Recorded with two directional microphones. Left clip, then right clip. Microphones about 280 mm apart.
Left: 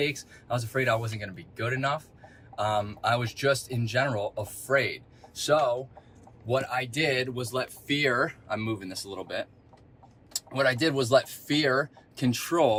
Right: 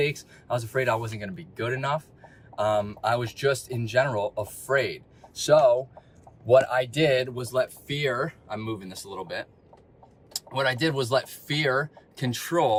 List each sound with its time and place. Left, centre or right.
0.0 s speech: centre
7.9 s speech: centre